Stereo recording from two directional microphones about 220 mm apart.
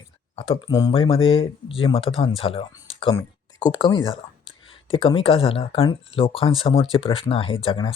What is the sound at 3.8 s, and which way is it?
Speech, 20° left (ahead or behind).